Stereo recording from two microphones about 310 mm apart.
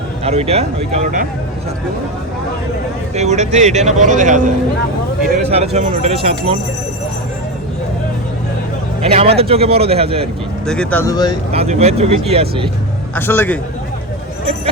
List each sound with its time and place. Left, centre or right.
0.3 s a man's voice: centre
3.2 s a man's voice: right
5.5 s a man's voice: right
9.0 s a man's voice: centre
10.7 s speech: centre
11.5 s a man's voice: right
13.1 s speech: centre